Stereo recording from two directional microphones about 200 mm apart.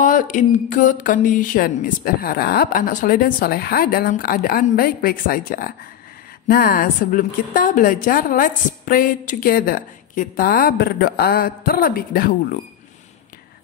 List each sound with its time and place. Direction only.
0.0 s a woman's voice: 40° left (ahead or behind)